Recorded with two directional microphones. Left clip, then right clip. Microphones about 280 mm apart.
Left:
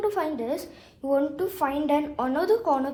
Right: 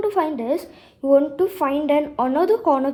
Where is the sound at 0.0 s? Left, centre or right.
Right.